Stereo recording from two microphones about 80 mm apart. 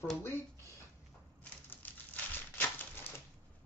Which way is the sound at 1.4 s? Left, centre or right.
Centre.